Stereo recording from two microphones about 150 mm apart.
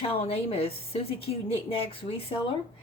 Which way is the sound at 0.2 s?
40° left (ahead or behind).